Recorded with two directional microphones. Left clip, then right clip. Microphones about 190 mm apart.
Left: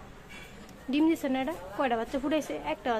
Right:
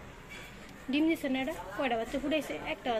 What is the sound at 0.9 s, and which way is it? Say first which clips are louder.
A woman's voice: left 3 dB; 20° left (ahead or behind).